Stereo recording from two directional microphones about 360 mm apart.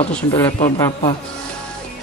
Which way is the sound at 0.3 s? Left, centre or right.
Centre.